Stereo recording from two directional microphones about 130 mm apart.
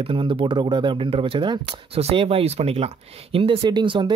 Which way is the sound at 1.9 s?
50° right (ahead or behind).